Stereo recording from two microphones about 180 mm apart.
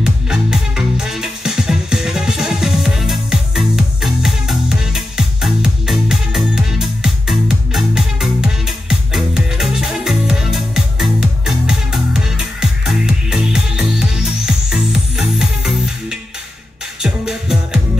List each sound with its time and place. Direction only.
0.0 s music: 5° right (ahead or behind)